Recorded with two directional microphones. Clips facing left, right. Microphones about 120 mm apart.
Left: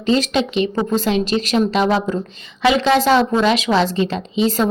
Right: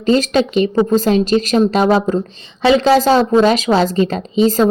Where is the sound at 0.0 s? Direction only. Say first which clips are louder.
Right 4 dB; 40° right (ahead or behind).